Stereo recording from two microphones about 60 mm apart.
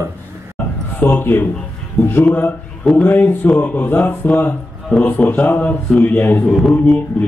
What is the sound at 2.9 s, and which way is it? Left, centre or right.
Speech, left.